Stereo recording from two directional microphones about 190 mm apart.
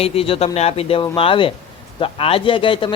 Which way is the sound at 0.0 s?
30° left (ahead or behind).